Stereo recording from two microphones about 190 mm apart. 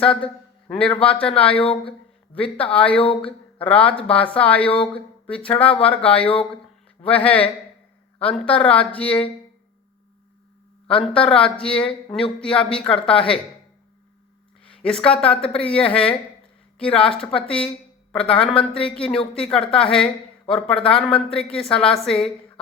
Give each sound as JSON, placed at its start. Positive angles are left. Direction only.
{"t": 0.0, "sound": "speech", "side_deg": 5}
{"t": 1.6, "sound": "speech", "side_deg": 30}
{"t": 2.3, "sound": "speech", "side_deg": 5}
{"t": 4.7, "sound": "speech", "side_deg": 30}
{"t": 5.2, "sound": "speech", "side_deg": 5}
{"t": 10.8, "sound": "speech", "side_deg": 5}
{"t": 14.7, "sound": "speech", "side_deg": 5}